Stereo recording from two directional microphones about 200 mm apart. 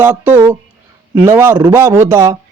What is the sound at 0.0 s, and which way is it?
A man's voice, 10° right (ahead or behind).